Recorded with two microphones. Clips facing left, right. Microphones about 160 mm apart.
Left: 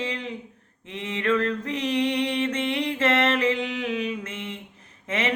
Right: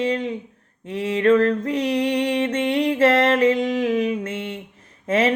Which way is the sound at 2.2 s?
40° right (ahead or behind).